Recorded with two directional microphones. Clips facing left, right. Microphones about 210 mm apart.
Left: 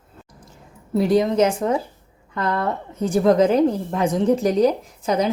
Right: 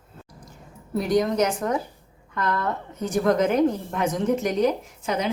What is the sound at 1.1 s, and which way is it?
A woman's voice, 25° left (ahead or behind).